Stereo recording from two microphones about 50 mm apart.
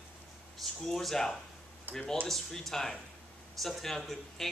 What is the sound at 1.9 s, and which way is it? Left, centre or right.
Speech, right.